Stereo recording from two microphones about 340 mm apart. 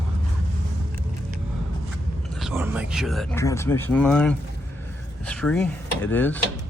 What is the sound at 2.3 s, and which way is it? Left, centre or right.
Speech, centre.